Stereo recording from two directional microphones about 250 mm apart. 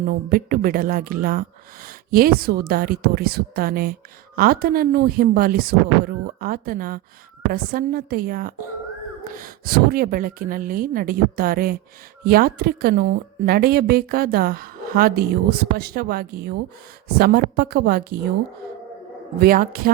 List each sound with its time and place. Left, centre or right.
0.1 s a woman's voice: right
19.4 s a woman's voice: right